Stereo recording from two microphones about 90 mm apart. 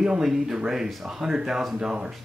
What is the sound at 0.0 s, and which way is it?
Speech, 5° right (ahead or behind).